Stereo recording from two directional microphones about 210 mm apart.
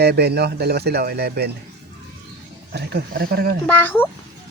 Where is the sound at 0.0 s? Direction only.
50° right (ahead or behind).